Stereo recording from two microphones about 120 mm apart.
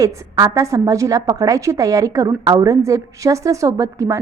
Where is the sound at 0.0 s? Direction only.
25° right (ahead or behind).